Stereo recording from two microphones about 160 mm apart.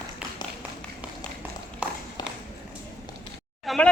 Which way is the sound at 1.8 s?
5° right (ahead or behind).